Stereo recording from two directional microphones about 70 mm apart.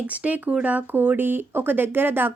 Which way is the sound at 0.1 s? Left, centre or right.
Right.